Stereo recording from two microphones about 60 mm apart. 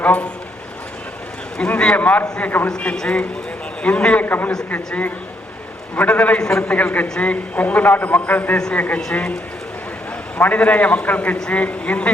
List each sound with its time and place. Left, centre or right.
0.0 s speech: left
1.5 s a man's voice: centre; by 2.6 s left
2.6 s a man's voice: centre
4.3 s a man's voice: left
6.0 s a man's voice: left
10.3 s a man's voice: left